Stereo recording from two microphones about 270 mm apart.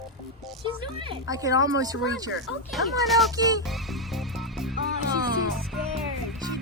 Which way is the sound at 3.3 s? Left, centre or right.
Centre.